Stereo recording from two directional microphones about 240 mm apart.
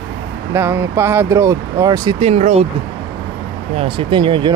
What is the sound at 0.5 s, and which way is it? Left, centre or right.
Speech, centre.